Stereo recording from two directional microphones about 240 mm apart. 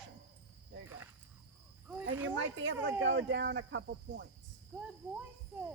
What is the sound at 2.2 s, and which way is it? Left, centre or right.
Speech, right.